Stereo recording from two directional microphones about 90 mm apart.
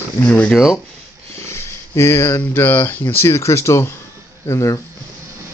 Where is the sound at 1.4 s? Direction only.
30° left (ahead or behind).